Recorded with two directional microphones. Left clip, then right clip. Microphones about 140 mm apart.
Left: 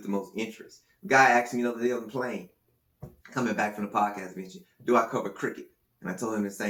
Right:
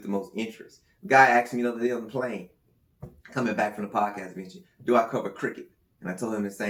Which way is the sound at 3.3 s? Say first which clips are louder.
Right 2 dB; 50° right (ahead or behind).